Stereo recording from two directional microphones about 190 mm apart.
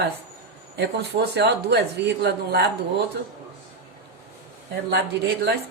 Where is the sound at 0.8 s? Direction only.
55° right (ahead or behind).